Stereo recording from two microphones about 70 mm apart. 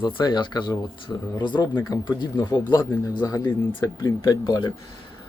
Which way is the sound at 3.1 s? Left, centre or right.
Left.